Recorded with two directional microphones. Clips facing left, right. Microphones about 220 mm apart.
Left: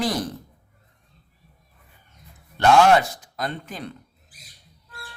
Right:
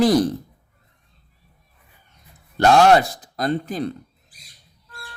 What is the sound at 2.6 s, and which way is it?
Speech, 35° right (ahead or behind).